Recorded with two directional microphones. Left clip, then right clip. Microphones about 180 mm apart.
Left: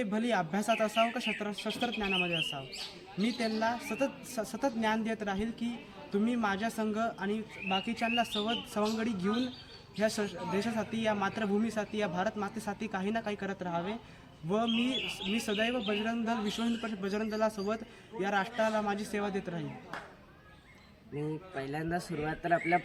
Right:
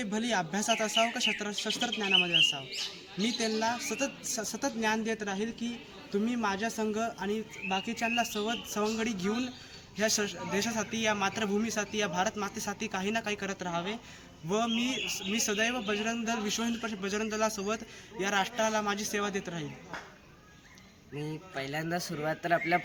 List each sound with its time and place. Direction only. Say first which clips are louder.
0.0 s a man's voice: even; 10° left (ahead or behind)
3.2 s a man's voice: right 2 dB; 15° left (ahead or behind)
21.2 s speech: even; 10° right (ahead or behind)